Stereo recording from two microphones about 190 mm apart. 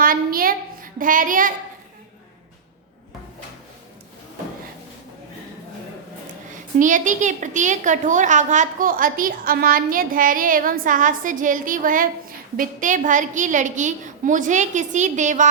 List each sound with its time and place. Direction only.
0.0 s a sound: 50° right (ahead or behind)
0.9 s a woman's voice: 45° right (ahead or behind)
6.7 s a woman's voice: 40° right (ahead or behind)